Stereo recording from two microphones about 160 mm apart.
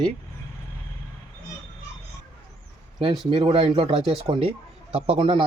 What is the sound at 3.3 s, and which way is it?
Speech, 35° right (ahead or behind).